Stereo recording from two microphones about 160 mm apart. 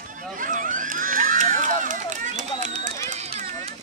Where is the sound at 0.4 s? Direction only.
55° right (ahead or behind).